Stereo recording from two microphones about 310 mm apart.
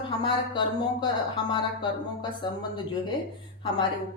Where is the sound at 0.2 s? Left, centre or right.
Centre.